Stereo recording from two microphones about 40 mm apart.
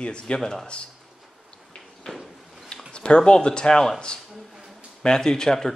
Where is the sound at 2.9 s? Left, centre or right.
Left.